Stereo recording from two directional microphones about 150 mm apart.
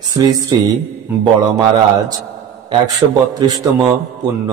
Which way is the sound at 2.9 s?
25° right (ahead or behind).